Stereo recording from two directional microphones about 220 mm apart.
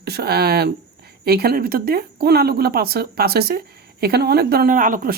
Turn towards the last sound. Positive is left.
turn(degrees=-40)  # may be behind; listen again after turning